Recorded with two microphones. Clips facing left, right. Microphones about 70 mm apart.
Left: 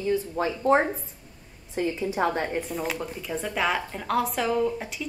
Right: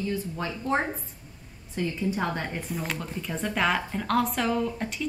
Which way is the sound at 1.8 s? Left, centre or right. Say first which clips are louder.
Left 3 dB; centre.